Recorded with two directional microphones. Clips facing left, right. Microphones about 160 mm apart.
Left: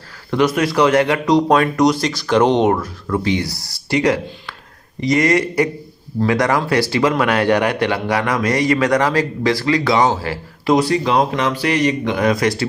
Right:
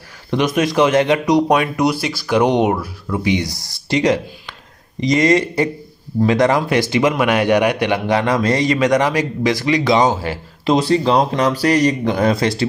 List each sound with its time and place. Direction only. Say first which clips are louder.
0.3 s a man's voice: left 1 dB; 20° right (ahead or behind)